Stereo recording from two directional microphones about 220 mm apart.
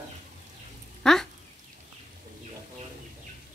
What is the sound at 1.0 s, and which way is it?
Speech, 5° left (ahead or behind).